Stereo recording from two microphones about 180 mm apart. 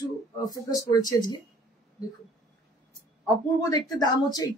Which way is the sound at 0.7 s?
20° left (ahead or behind).